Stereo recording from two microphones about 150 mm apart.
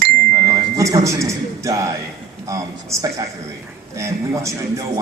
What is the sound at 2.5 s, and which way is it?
Speech, 20° right (ahead or behind).